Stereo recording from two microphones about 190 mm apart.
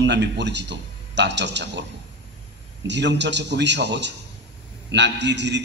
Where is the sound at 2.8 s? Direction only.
65° right (ahead or behind).